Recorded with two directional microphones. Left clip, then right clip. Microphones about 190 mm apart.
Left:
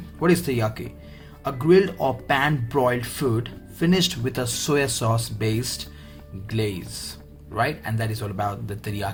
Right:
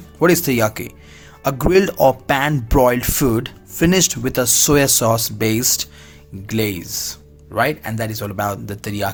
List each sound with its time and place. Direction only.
0.2 s speech: 55° right (ahead or behind)